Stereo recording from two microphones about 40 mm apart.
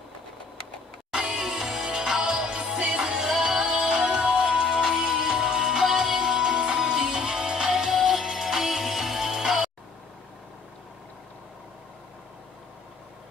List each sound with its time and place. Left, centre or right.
1.1 s music: centre
4.6 s music: centre